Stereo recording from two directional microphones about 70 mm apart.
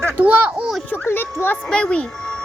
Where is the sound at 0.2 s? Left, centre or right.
Right.